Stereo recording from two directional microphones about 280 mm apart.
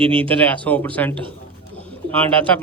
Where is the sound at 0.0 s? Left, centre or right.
Centre.